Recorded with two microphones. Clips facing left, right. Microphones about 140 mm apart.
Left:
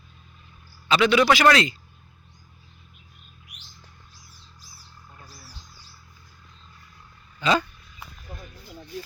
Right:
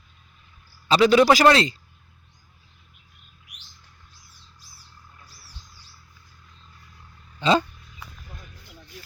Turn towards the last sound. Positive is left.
turn(degrees=-30)  # may be behind; listen again after turning